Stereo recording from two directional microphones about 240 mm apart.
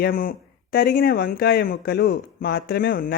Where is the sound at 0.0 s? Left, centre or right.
Left.